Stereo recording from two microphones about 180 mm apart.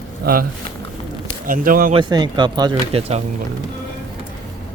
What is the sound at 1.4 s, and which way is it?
Speech, 50° right (ahead or behind).